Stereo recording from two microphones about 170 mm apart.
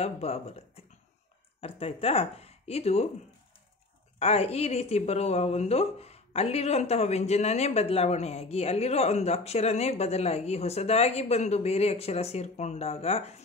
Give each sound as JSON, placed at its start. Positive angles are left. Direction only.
{"t": 0.0, "sound": "a woman's voice", "side_deg": 35}
{"t": 1.6, "sound": "a woman's voice", "side_deg": 35}
{"t": 4.2, "sound": "a woman's voice", "side_deg": 35}